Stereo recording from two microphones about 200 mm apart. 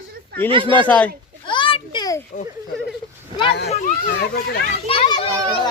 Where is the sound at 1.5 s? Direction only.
25° left (ahead or behind).